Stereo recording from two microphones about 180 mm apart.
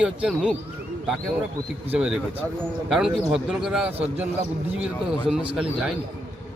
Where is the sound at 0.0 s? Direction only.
5° right (ahead or behind).